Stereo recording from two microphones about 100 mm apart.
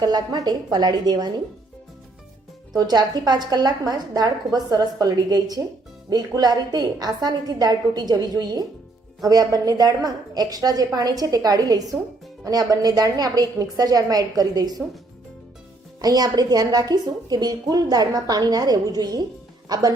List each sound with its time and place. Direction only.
0.0 s a woman's voice: 40° right (ahead or behind)
2.7 s a woman's voice: 45° right (ahead or behind)
16.0 s a woman's voice: 40° right (ahead or behind)